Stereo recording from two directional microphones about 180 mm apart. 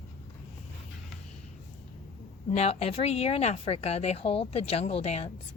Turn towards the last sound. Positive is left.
turn(degrees=35)  # may be behind; listen again after turning